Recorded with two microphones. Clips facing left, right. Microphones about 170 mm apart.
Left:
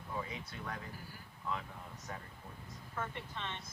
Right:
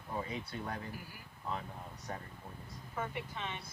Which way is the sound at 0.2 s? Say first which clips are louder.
Right 5 dB; 35° right (ahead or behind).